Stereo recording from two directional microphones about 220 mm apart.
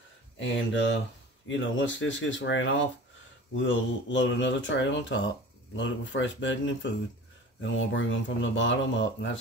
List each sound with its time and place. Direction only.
0.4 s speech: 55° left (ahead or behind)